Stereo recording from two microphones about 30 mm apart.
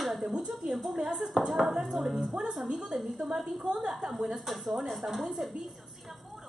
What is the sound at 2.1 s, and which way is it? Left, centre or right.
Speech, right.